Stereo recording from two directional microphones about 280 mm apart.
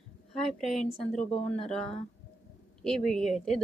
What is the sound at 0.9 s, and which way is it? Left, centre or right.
Speech, left.